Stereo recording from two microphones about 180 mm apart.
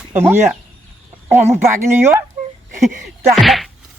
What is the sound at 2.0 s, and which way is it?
Speech, 15° right (ahead or behind).